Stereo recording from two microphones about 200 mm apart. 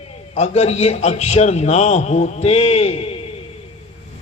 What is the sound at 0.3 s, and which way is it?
A man's voice, 35° left (ahead or behind).